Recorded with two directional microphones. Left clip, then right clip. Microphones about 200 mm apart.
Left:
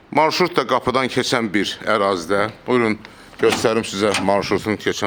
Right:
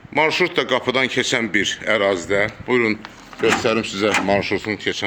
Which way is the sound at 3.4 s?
50° left (ahead or behind).